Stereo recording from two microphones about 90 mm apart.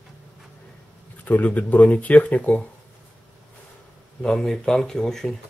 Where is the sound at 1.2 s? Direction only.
20° left (ahead or behind).